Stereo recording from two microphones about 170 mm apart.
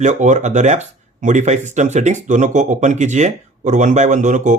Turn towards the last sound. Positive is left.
turn(degrees=-45)  # may be behind; listen again after turning